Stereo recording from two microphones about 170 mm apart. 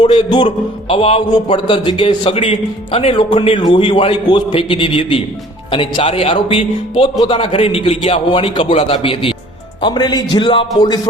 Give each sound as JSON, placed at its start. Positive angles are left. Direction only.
{"t": 0.0, "sound": "a man's voice", "side_deg": 30}